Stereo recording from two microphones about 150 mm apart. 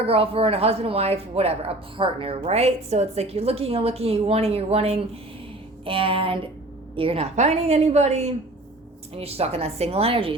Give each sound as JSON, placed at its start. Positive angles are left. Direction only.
{"t": 0.0, "sound": "speech", "side_deg": -40}